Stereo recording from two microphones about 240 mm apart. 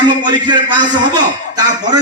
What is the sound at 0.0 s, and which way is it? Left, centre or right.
A man's voice, centre.